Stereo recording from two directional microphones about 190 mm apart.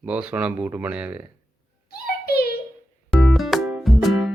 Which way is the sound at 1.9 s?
55° left (ahead or behind).